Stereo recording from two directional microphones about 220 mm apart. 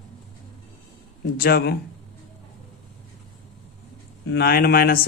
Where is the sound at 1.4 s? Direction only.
45° left (ahead or behind).